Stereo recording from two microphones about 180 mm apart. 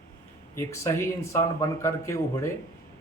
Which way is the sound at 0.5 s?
15° left (ahead or behind).